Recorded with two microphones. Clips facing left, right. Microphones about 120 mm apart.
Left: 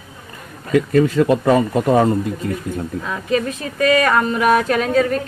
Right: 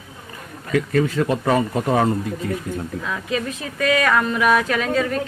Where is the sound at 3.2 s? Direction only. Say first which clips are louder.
Left 9 dB; 45° left (ahead or behind).